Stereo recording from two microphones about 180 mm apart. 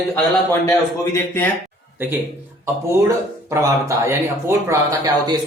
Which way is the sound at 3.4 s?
15° right (ahead or behind).